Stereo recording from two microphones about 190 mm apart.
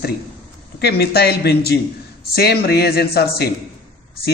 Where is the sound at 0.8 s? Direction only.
55° left (ahead or behind).